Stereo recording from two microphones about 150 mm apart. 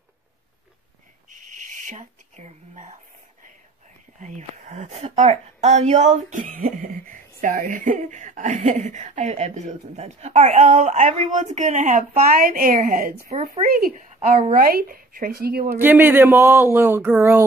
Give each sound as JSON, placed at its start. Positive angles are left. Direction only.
{"t": 1.3, "sound": "whispering", "side_deg": -55}
{"t": 4.2, "sound": "a woman's voice", "side_deg": -55}
{"t": 13.3, "sound": "a woman's voice", "side_deg": -50}
{"t": 13.7, "sound": "speech", "side_deg": -85}
{"t": 13.9, "sound": "a woman's voice", "side_deg": -40}
{"t": 14.5, "sound": "speech", "side_deg": -75}
{"t": 15.7, "sound": "speech", "side_deg": -15}